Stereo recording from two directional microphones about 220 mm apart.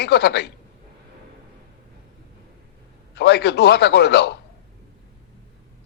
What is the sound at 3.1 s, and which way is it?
A man's voice, 50° left (ahead or behind).